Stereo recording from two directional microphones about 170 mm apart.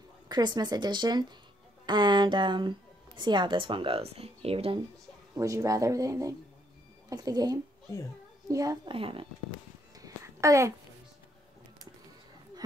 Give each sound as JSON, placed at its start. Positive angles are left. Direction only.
{"t": 0.3, "sound": "speech", "side_deg": -25}
{"t": 5.3, "sound": "speech", "side_deg": -20}
{"t": 8.9, "sound": "speech", "side_deg": -30}
{"t": 9.9, "sound": "a sound", "side_deg": -20}